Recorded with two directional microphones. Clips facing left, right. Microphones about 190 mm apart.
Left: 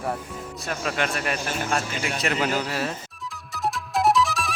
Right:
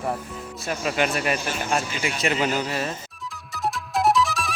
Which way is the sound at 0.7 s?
5° right (ahead or behind).